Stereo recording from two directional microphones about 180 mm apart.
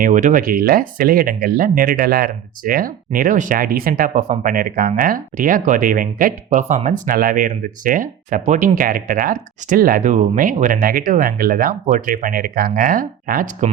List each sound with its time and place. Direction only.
0.0 s speech: 45° right (ahead or behind)
4.5 s speech: 55° right (ahead or behind)